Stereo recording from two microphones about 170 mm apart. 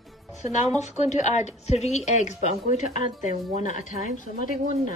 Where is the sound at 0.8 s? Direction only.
45° left (ahead or behind).